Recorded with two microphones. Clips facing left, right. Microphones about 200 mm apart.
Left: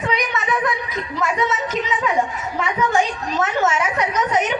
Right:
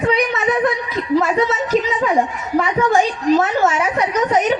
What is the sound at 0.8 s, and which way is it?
A woman's voice, 30° right (ahead or behind).